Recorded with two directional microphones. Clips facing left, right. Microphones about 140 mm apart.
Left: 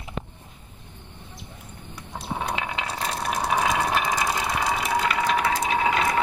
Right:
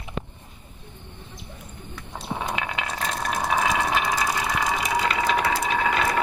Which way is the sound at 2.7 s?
5° left (ahead or behind).